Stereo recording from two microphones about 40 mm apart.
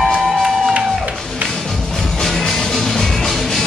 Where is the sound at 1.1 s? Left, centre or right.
Centre.